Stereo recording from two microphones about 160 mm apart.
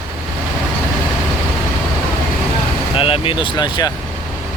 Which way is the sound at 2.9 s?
35° left (ahead or behind).